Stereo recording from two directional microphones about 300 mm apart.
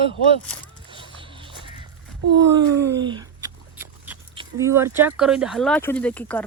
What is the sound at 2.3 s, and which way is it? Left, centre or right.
Speech, centre.